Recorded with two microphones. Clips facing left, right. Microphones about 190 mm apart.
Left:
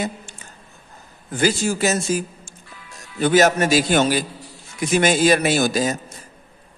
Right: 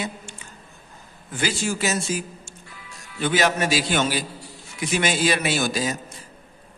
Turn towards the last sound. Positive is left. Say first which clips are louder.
# left 5 dB
turn(degrees=45)  # may be behind; listen again after turning